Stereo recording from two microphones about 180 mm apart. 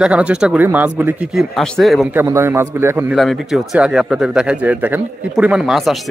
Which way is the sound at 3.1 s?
Centre (ahead or behind).